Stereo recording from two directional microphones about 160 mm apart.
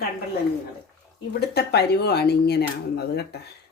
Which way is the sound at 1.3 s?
90° left.